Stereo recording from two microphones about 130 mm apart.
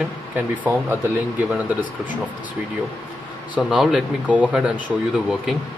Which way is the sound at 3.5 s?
5° right (ahead or behind).